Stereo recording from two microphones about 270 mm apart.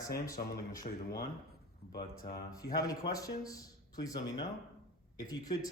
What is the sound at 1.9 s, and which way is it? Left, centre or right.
A man's voice, centre.